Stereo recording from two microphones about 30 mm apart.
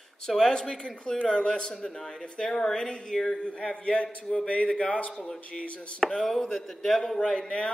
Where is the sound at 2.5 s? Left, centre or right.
Centre.